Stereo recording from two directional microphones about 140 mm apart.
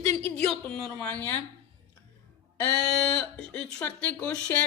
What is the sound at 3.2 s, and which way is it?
Speech, 5° left (ahead or behind).